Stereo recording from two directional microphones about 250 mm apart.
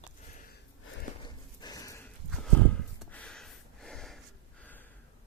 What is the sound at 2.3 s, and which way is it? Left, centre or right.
Snort, centre.